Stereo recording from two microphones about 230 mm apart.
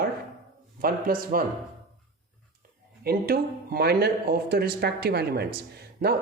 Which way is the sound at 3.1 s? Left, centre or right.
Right.